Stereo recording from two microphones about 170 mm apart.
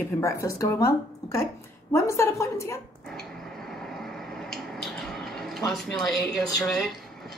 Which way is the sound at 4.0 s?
Centre (ahead or behind).